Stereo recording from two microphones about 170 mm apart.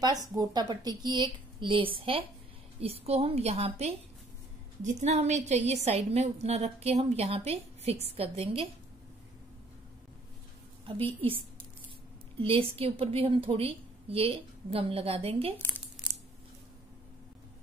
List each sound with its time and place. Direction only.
0.3 s a woman's voice: 25° right (ahead or behind)
11.1 s a woman's voice: 30° right (ahead or behind)
12.4 s a woman's voice: 35° right (ahead or behind)